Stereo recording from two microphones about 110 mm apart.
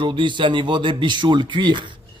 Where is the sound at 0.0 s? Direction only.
45° right (ahead or behind).